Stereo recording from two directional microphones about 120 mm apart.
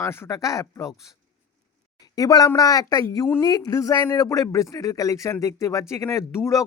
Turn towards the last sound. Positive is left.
turn(degrees=25)  # may be behind; listen again after turning